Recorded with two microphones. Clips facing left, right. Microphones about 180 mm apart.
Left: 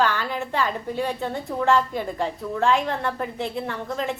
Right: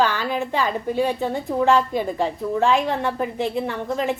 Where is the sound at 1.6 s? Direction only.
15° right (ahead or behind).